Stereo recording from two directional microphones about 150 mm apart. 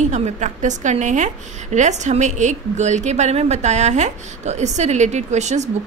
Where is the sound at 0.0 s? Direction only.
50° right (ahead or behind).